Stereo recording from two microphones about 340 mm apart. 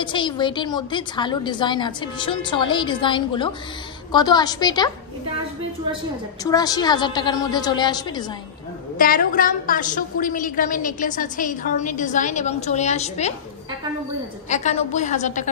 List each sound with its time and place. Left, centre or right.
0.0 s a woman's voice: centre
6.4 s a woman's voice: centre
8.9 s a woman's voice: left
14.5 s a woman's voice: left